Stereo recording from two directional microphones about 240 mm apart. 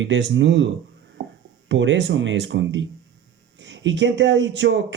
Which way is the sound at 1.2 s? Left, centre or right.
Right.